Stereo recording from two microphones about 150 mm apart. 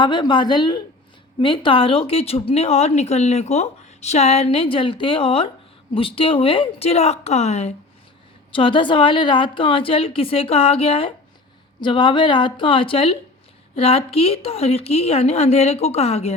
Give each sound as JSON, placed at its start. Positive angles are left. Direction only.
{"t": 0.0, "sound": "a woman's voice", "side_deg": 30}
{"t": 8.5, "sound": "a woman's voice", "side_deg": 35}